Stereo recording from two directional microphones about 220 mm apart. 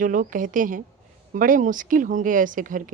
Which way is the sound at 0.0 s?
35° right (ahead or behind).